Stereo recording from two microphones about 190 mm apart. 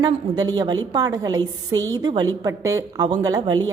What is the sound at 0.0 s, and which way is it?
A woman's voice, 20° right (ahead or behind).